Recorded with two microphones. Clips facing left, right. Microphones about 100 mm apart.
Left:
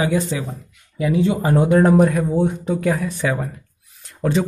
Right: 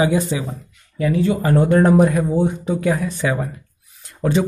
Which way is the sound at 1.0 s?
15° left (ahead or behind).